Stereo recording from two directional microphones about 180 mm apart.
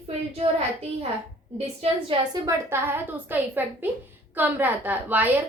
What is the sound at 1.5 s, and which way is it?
Speech, 35° right (ahead or behind).